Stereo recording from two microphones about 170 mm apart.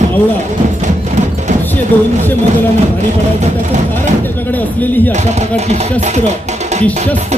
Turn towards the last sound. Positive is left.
turn(degrees=-40)  # may be behind; listen again after turning